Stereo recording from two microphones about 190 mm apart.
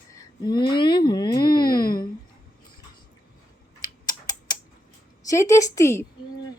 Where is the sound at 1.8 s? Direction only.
50° left (ahead or behind).